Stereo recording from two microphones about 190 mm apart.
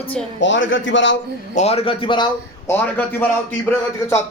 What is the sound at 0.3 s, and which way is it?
Speech, 75° left (ahead or behind).